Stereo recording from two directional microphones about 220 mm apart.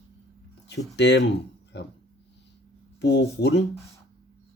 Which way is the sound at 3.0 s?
50° left (ahead or behind).